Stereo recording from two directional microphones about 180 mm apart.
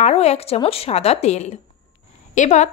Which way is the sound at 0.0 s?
35° left (ahead or behind).